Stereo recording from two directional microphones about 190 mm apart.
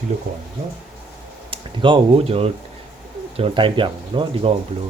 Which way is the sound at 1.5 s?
25° right (ahead or behind).